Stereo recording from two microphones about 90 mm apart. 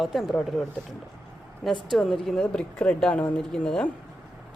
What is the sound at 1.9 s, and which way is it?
Speech, 5° left (ahead or behind).